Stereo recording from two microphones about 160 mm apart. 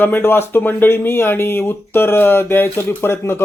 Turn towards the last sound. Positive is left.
turn(degrees=15)  # may be behind; listen again after turning